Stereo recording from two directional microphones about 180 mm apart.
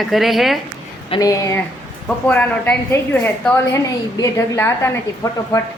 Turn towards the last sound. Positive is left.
turn(degrees=15)  # may be behind; listen again after turning